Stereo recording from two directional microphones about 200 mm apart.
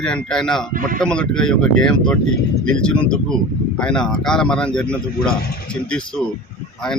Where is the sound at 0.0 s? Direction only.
5° left (ahead or behind).